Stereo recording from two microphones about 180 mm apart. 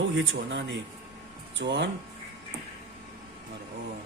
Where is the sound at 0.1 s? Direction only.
90° right.